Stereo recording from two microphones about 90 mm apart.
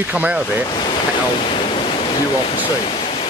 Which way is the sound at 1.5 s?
75° left (ahead or behind).